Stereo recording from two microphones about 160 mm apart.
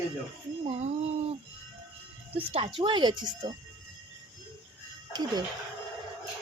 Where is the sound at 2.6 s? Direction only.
30° right (ahead or behind).